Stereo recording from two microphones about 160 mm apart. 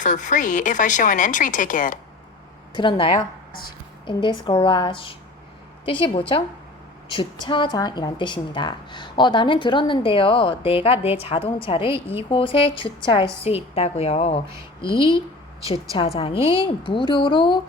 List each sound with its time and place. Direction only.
0.0 s speech: 50° left (ahead or behind)
2.7 s a woman's voice: 30° left (ahead or behind)